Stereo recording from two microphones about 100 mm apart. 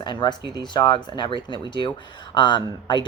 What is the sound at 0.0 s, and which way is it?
Speech, 50° left (ahead or behind).